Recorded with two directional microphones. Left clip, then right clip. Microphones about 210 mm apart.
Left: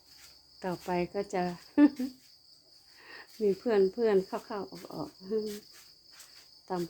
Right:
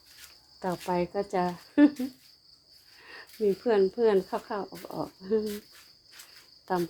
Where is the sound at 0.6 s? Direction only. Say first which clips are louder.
Right 3 dB; 5° right (ahead or behind).